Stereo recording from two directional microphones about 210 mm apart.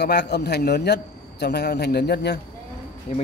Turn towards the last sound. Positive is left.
turn(degrees=30)  # may be behind; listen again after turning